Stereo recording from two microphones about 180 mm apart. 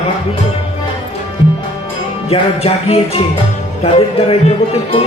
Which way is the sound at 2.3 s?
35° left (ahead or behind).